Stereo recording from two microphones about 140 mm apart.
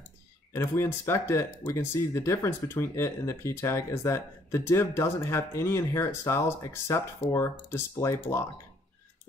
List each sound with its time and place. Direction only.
0.5 s speech: 20° left (ahead or behind)